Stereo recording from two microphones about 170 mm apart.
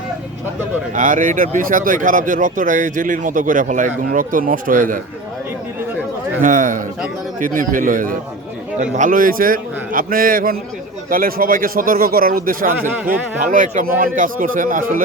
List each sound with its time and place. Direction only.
0.9 s speech: 50° right (ahead or behind)
6.4 s a man's voice: 50° right (ahead or behind)